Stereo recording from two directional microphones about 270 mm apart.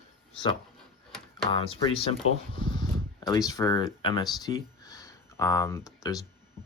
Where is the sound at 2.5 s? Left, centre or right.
Centre.